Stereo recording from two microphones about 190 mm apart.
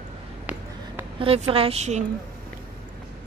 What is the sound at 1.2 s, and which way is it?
Speech, 30° right (ahead or behind).